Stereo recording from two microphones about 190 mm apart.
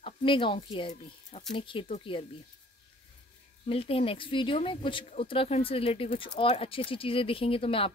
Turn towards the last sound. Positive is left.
turn(degrees=30)  # may be behind; listen again after turning